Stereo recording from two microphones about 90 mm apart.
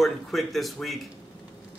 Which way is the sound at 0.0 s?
Centre (ahead or behind).